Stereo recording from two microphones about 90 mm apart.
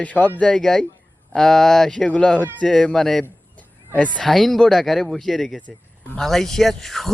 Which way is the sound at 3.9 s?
15° left (ahead or behind).